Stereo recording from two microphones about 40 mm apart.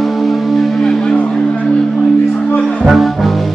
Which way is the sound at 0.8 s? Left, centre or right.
Left.